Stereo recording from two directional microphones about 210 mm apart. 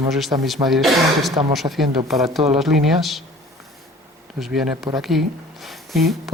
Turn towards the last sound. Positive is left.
turn(degrees=0)  # may be behind; listen again after turning